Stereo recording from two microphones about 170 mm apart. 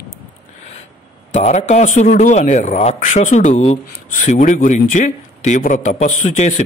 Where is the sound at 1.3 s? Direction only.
45° left (ahead or behind).